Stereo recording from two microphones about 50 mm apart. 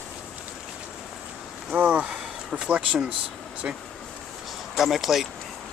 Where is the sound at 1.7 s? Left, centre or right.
Right.